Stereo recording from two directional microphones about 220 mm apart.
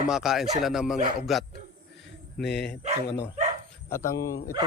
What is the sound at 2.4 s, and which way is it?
Speech, 50° left (ahead or behind).